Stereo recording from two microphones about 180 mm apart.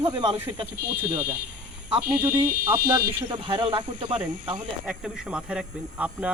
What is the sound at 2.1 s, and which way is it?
Speech, 15° right (ahead or behind).